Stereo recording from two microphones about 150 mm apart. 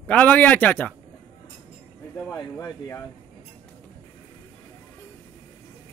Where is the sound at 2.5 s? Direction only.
15° left (ahead or behind).